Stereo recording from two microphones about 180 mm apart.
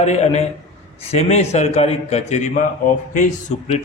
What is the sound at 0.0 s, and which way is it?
A man's voice, 40° left (ahead or behind).